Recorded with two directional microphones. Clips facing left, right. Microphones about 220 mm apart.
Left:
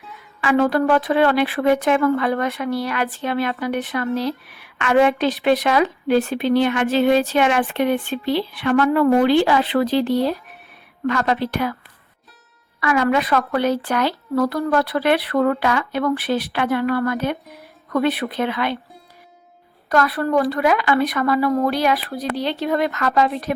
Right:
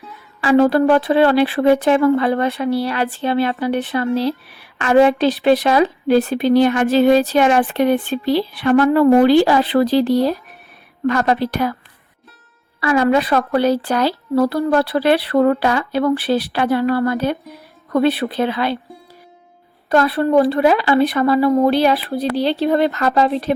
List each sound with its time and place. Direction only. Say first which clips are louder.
0.4 s speech: right 4 dB; 30° right (ahead or behind)
12.8 s speech: right 3 dB; 30° right (ahead or behind)
19.9 s a woman's voice: right 4 dB; 25° right (ahead or behind)